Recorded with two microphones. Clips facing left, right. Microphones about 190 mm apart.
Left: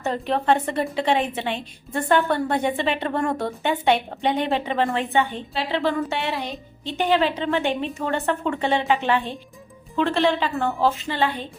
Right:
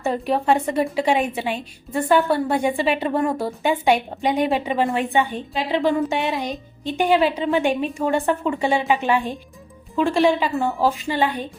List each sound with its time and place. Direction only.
0.0 s a woman's voice: 10° right (ahead or behind)